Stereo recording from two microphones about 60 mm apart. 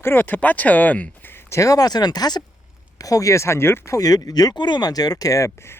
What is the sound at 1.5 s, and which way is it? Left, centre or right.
Speech, left.